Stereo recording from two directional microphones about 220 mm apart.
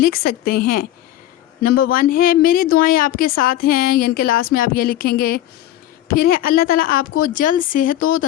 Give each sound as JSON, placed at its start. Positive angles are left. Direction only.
{"t": 0.0, "sound": "a woman's voice", "side_deg": 45}